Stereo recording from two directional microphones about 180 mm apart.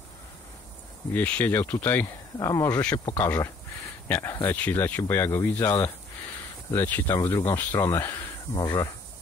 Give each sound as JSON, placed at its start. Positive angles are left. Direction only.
{"t": 1.1, "sound": "speech", "side_deg": 10}